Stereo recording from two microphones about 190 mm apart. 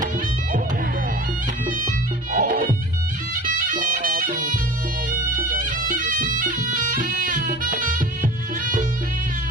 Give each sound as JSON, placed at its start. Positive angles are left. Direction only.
{"t": 2.3, "sound": "music", "side_deg": -45}
{"t": 3.7, "sound": "music", "side_deg": -45}
{"t": 5.3, "sound": "bagpipes", "side_deg": -45}